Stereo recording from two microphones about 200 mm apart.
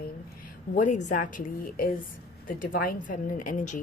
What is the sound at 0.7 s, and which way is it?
A woman's voice, 40° left (ahead or behind).